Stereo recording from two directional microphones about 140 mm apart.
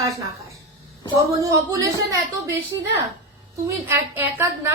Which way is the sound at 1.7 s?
25° right (ahead or behind).